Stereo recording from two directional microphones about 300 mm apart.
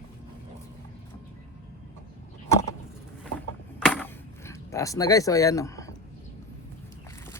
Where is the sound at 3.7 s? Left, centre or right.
Centre.